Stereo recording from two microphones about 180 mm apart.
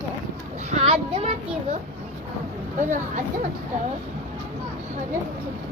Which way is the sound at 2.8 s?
45° right (ahead or behind).